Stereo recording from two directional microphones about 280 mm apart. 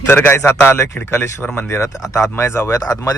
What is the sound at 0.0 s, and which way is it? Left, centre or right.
A man's voice, centre.